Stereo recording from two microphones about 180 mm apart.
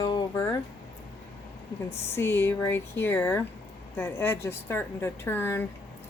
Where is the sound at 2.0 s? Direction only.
15° left (ahead or behind).